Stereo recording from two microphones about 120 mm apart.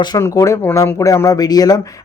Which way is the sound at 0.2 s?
25° left (ahead or behind).